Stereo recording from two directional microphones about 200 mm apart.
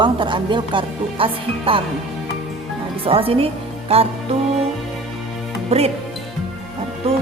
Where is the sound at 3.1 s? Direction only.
30° right (ahead or behind).